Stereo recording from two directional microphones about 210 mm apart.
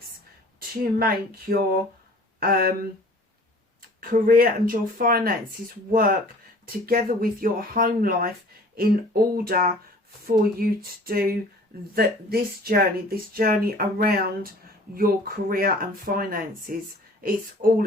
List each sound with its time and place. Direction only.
0.9 s speech: 45° right (ahead or behind)
4.0 s speech: 45° right (ahead or behind)